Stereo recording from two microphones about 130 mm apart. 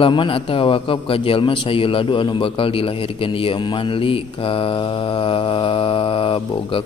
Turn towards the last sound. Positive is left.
turn(degrees=40)  # may be behind; listen again after turning